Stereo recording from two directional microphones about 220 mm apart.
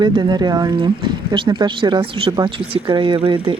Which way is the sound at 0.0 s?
20° right (ahead or behind).